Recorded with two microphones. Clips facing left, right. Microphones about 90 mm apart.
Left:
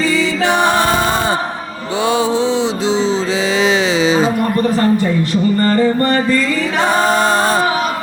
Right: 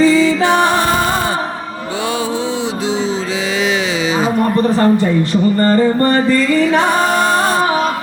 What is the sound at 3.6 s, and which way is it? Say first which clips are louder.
Music: left 4 dB; 30° left (ahead or behind).